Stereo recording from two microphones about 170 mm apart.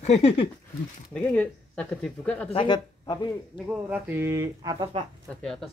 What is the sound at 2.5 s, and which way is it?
Speech, 30° left (ahead or behind).